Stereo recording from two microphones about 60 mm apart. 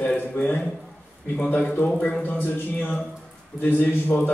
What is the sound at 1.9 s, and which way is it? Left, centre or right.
Speech, centre.